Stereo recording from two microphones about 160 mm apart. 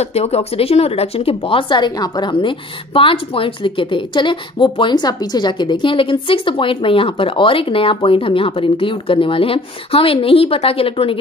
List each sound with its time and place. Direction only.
0.0 s speech: 40° left (ahead or behind)